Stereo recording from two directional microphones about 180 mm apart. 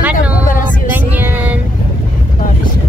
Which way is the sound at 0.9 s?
10° right (ahead or behind).